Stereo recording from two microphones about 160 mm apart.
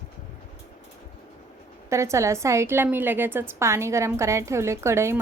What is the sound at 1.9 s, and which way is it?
A woman's voice, 20° right (ahead or behind).